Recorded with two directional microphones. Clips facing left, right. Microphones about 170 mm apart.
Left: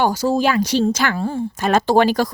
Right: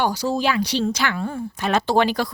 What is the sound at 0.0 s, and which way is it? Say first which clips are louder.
A woman's voice: left 4 dB; 45° left (ahead or behind).